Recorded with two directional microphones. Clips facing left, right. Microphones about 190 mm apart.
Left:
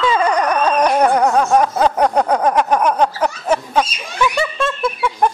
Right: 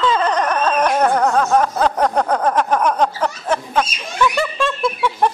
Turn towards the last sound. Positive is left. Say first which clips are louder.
# even
turn(degrees=0)  # may be behind; listen again after turning